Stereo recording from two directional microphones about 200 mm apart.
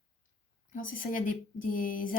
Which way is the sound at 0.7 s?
45° left (ahead or behind).